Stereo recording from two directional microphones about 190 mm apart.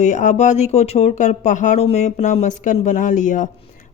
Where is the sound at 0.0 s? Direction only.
40° left (ahead or behind).